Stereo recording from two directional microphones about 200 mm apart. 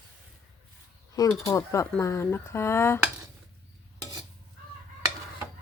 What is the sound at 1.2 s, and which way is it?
Speech, 15° left (ahead or behind).